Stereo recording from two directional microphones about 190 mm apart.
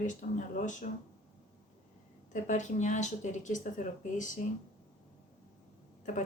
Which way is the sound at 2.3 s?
40° left (ahead or behind).